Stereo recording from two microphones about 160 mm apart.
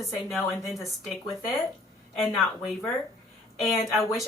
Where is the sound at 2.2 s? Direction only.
Centre (ahead or behind).